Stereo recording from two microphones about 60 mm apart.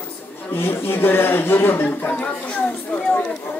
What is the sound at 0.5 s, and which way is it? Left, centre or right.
A man's voice, left.